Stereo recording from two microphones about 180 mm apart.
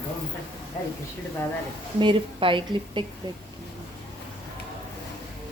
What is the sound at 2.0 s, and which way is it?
A woman's voice, 30° right (ahead or behind).